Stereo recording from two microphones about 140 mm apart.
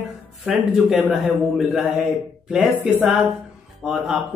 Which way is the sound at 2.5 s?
10° right (ahead or behind).